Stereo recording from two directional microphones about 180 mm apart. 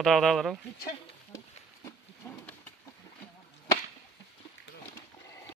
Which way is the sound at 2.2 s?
15° left (ahead or behind).